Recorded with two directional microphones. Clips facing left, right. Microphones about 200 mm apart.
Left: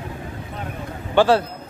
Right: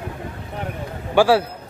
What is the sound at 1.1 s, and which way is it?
Speech, 10° right (ahead or behind).